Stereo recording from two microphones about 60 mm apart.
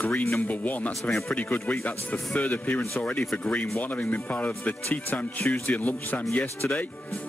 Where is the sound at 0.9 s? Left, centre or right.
Centre.